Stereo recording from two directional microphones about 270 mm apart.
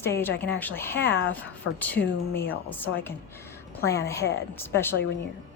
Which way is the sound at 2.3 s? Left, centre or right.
Centre.